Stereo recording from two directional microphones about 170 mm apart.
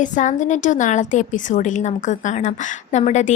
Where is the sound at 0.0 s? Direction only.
45° left (ahead or behind).